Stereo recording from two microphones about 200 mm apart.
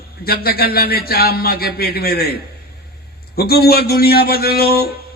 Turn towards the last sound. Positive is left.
turn(degrees=50)  # may be behind; listen again after turning